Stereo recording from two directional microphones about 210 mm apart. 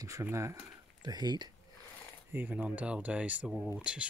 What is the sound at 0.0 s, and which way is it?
Speech, 15° right (ahead or behind).